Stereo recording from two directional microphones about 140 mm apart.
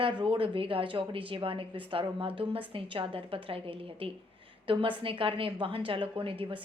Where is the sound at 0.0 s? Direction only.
35° right (ahead or behind).